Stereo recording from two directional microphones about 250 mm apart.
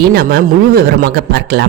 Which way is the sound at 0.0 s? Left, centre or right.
Right.